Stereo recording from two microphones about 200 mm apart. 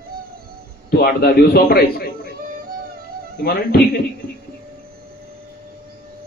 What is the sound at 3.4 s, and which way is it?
Speech, 50° left (ahead or behind).